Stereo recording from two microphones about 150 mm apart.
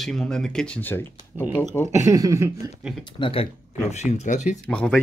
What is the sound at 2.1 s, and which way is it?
Speech, 20° right (ahead or behind).